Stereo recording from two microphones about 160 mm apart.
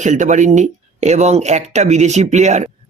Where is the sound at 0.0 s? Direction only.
50° right (ahead or behind).